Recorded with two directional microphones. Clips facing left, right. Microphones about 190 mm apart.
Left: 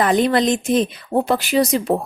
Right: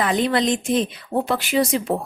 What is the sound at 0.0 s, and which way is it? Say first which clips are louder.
Speech: left 4 dB; 45° left (ahead or behind).